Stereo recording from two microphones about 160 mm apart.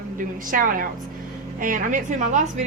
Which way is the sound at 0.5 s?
60° right (ahead or behind).